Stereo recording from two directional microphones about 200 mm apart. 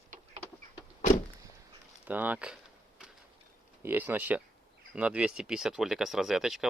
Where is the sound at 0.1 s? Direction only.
40° right (ahead or behind).